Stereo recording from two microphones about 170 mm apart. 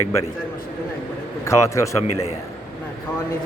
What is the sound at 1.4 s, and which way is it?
Speech, 15° left (ahead or behind).